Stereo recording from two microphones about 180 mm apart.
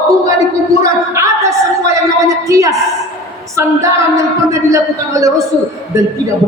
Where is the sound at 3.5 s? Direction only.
15° right (ahead or behind).